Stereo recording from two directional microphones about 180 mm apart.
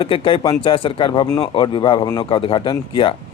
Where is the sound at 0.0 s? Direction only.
30° left (ahead or behind).